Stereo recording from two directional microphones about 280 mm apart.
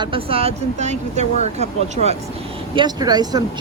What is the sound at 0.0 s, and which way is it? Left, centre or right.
Speech, centre.